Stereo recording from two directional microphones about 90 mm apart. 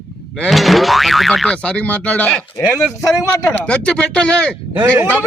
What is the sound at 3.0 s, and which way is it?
Speech, 30° left (ahead or behind).